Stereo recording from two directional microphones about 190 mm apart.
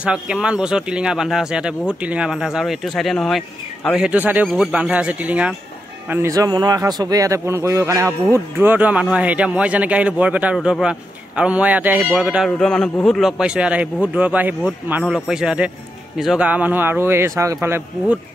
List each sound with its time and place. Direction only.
0.0 s a man's voice: 5° right (ahead or behind)
12.4 s a man's voice: 5° left (ahead or behind)